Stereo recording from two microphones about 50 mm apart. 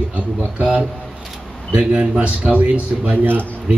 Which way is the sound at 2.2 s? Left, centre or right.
Right.